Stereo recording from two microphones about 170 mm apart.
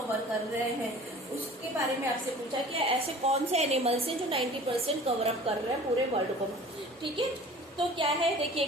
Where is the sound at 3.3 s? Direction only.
40° right (ahead or behind).